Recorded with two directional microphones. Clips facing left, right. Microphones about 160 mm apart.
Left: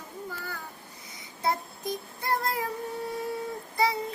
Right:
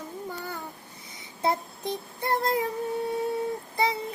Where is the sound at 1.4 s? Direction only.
25° right (ahead or behind).